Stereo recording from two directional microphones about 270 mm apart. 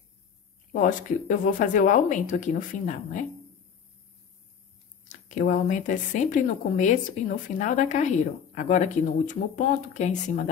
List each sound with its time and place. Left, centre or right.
0.7 s a woman's voice: left
5.0 s a woman's voice: left